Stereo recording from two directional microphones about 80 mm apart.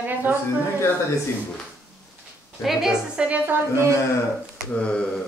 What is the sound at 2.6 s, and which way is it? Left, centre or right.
A woman's voice, centre.